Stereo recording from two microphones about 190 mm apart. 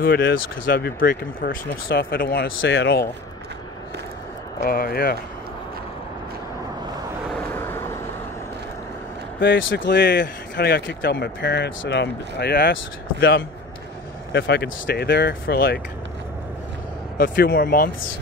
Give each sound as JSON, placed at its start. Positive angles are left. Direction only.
{"t": 0.1, "sound": "speech", "side_deg": 70}
{"t": 0.7, "sound": "speech", "side_deg": 55}
{"t": 2.6, "sound": "speech", "side_deg": 80}
{"t": 4.6, "sound": "speech", "side_deg": 50}
{"t": 7.3, "sound": "vehicle", "side_deg": 10}
{"t": 9.4, "sound": "speech", "side_deg": 70}
{"t": 14.3, "sound": "speech", "side_deg": 60}
{"t": 17.2, "sound": "speech", "side_deg": 50}